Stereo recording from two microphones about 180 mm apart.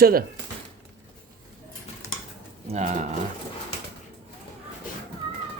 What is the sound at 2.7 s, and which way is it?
Speech, 40° right (ahead or behind).